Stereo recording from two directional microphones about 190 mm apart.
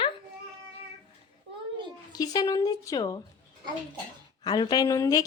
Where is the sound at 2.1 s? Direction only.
20° left (ahead or behind).